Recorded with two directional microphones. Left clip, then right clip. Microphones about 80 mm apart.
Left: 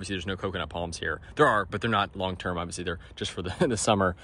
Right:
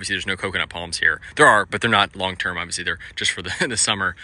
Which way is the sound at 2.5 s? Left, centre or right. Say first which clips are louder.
Right 8 dB; left.